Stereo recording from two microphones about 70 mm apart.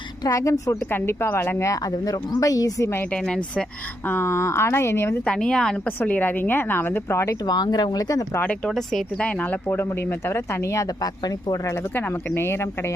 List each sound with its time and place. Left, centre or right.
0.3 s a woman's voice: left
0.8 s speech: left
1.7 s speech: left
3.1 s speech: centre
4.0 s speech: left
5.2 s a woman's voice: centre; by 7.3 s left
7.4 s speech: left
8.7 s speech: centre
9.1 s a woman's voice: centre
9.7 s speech: left
10.8 s speech: left
11.7 s speech: left